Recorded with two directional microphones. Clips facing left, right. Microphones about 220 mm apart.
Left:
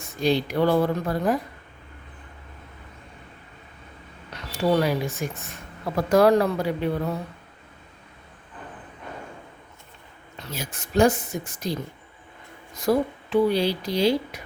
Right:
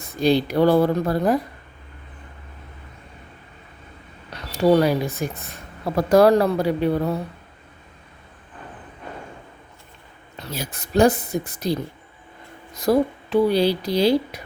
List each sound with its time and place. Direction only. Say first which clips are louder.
0.0 s speech: right 4 dB; 35° right (ahead or behind)
4.5 s speech: right 5 dB; 35° right (ahead or behind)
10.4 s speech: right 3 dB; 35° right (ahead or behind)